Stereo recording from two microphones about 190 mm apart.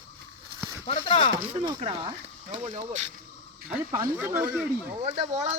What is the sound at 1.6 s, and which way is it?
Speech, 30° right (ahead or behind).